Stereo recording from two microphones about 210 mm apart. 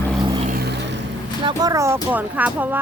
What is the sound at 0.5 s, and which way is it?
Vehicle, 50° right (ahead or behind).